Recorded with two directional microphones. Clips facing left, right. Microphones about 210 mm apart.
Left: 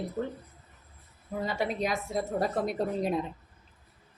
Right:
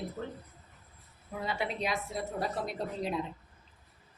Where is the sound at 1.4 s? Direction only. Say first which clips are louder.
Left 3 dB; 45° left (ahead or behind).